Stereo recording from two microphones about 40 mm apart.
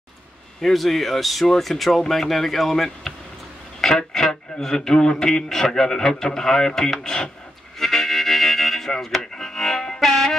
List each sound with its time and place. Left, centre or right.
0.6 s speech: centre
7.8 s music: centre